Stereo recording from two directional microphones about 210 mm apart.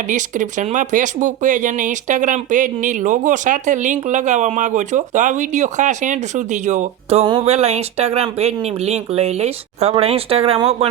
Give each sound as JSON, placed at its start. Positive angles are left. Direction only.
{"t": 0.1, "sound": "speech", "side_deg": -35}